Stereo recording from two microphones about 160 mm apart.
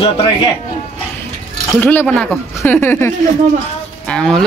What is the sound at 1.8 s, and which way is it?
Speech, 10° left (ahead or behind).